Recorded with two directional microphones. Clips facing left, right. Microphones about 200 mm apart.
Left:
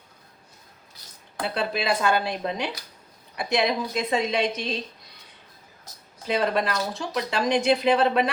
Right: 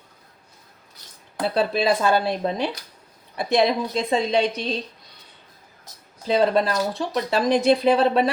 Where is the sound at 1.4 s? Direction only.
35° right (ahead or behind).